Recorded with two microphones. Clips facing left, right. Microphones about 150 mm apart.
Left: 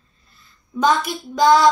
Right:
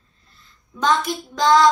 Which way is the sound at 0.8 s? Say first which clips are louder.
Left 1 dB; 10° left (ahead or behind).